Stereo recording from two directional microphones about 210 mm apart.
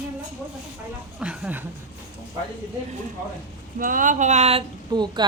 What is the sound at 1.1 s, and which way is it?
Speech, 5° right (ahead or behind).